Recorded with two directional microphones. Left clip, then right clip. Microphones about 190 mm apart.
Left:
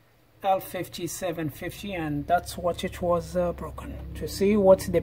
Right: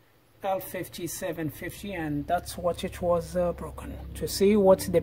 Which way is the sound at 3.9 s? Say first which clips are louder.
Right 1 dB; 15° right (ahead or behind).